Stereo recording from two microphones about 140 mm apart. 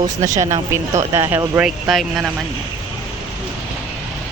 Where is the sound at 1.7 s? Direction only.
Centre (ahead or behind).